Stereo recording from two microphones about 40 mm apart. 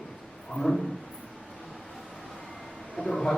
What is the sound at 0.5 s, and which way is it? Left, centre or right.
Speech, centre.